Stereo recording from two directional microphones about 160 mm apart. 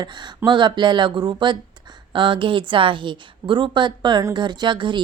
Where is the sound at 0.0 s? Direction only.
30° right (ahead or behind).